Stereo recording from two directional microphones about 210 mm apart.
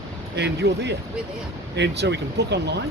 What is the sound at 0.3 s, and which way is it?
Speech, 55° right (ahead or behind).